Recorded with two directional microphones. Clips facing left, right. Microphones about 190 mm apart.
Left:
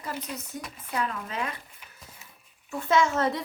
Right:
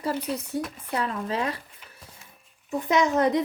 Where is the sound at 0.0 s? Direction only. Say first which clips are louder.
Right 7 dB; 30° right (ahead or behind).